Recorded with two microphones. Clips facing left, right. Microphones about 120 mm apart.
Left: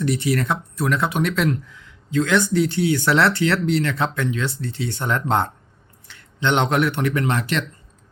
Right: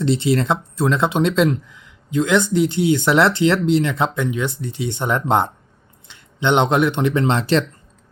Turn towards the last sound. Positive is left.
turn(degrees=-30)  # may be behind; listen again after turning